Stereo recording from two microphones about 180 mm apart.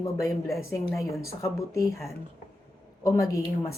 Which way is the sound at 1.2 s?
15° left (ahead or behind).